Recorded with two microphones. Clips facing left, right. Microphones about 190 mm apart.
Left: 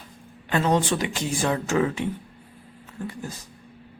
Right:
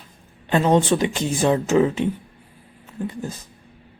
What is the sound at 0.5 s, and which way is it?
Speech, 20° right (ahead or behind).